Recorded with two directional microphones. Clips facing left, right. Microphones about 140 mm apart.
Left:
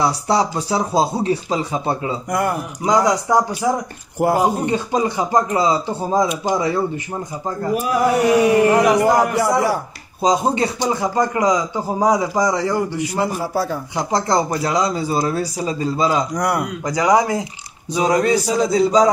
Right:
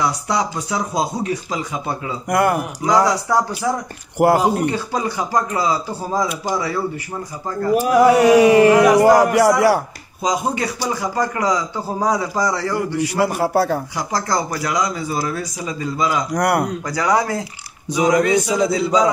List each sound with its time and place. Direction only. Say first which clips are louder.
0.0 s speech: left 3 dB; 30° left (ahead or behind)
2.2 s a man's voice: right 5 dB; 75° right (ahead or behind)
2.8 s a man's voice: left 1 dB; 20° left (ahead or behind)
4.2 s speech: right 2 dB; 80° right
4.6 s a man's voice: left 2 dB; 20° left (ahead or behind)
7.9 s speech: right 4 dB; 90° right
10.2 s a man's voice: left 3 dB; 30° left (ahead or behind)
13.2 s a man's voice: right 4 dB; 70° right (ahead or behind)
13.9 s a man's voice: left 3 dB; 25° left (ahead or behind)
16.3 s a man's voice: right 2 dB; 65° right (ahead or behind)
16.8 s speech: left 3 dB; 20° left (ahead or behind)
18.0 s speech: right 1 dB; 35° left (ahead or behind)